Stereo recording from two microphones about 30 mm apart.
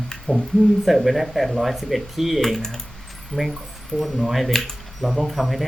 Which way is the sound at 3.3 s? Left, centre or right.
Left.